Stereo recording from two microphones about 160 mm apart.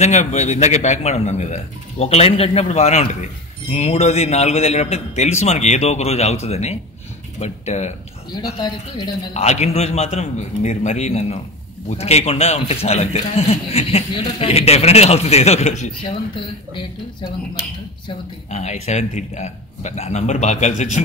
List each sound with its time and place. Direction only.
0.0 s a man's voice: 45° left (ahead or behind)
8.3 s a man's voice: 25° left (ahead or behind)
9.3 s a man's voice: 45° left (ahead or behind)
18.5 s a man's voice: 45° left (ahead or behind)